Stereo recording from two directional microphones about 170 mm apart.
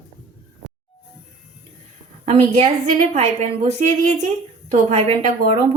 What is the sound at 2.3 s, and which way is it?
A woman's voice, 40° right (ahead or behind).